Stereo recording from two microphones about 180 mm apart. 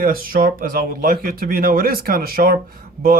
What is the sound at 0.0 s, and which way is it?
A man's voice, 50° right (ahead or behind).